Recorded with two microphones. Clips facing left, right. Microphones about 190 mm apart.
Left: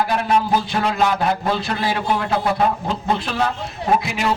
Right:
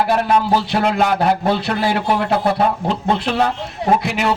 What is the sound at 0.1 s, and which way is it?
A man's voice, 60° right (ahead or behind).